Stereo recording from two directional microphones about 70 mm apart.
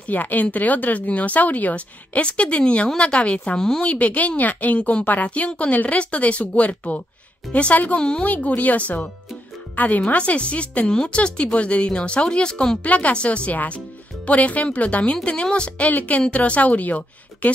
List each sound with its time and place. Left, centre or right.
0.1 s a woman's voice: left
3.9 s a woman's voice: left